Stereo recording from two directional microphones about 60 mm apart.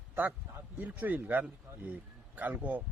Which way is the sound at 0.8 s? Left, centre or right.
Right.